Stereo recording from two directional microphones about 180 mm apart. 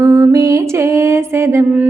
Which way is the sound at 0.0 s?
15° right (ahead or behind).